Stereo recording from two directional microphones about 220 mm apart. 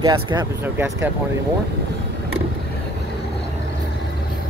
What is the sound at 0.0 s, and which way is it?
Speech, 20° right (ahead or behind).